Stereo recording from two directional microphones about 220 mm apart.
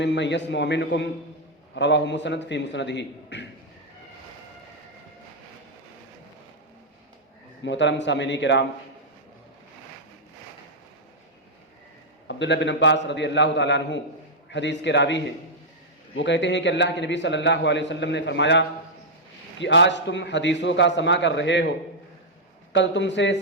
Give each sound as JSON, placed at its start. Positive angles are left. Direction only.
{"t": 0.0, "sound": "a man's voice", "side_deg": 55}
{"t": 7.6, "sound": "a man's voice", "side_deg": 55}
{"t": 12.3, "sound": "a man's voice", "side_deg": 55}
{"t": 22.7, "sound": "a man's voice", "side_deg": 55}